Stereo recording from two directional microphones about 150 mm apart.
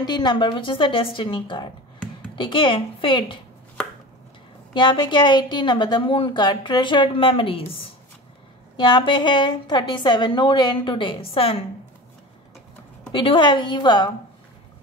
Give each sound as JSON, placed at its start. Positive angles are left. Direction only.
{"t": 0.0, "sound": "a woman's voice", "side_deg": 30}
{"t": 4.7, "sound": "a woman's voice", "side_deg": 30}
{"t": 8.7, "sound": "a woman's voice", "side_deg": 30}
{"t": 13.1, "sound": "a woman's voice", "side_deg": 35}